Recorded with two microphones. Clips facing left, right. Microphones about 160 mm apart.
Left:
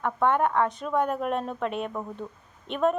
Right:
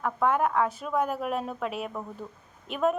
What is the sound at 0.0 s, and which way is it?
A woman's voice, centre (ahead or behind).